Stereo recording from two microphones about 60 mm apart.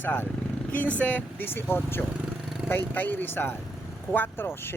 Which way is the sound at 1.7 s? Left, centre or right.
Left.